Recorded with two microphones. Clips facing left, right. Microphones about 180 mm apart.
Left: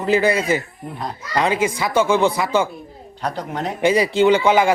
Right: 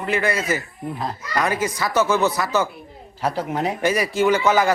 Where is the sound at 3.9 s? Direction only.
30° left (ahead or behind).